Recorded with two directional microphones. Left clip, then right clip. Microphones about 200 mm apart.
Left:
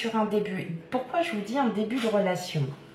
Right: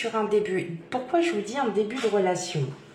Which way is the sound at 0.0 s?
45° right (ahead or behind).